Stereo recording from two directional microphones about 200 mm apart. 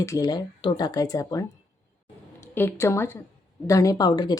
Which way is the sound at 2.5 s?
10° left (ahead or behind).